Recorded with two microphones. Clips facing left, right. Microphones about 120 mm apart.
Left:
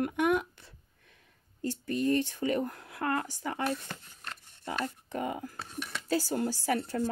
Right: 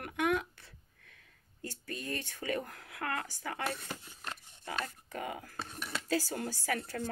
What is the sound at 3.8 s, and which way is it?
Speech, 10° right (ahead or behind).